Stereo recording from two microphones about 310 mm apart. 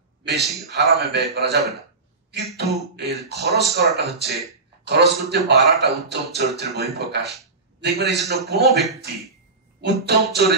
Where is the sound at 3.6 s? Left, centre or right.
Centre.